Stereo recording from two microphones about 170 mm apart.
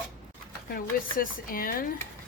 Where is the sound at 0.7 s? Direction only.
55° left (ahead or behind).